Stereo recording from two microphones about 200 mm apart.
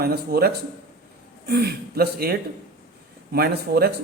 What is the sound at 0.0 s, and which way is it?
A man's voice, 50° right (ahead or behind).